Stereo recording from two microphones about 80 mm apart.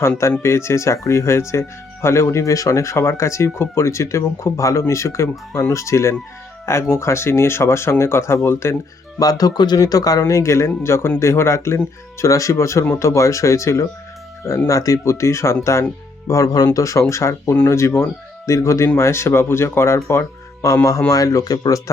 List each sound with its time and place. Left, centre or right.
0.4 s speech: left
9.1 s speech: left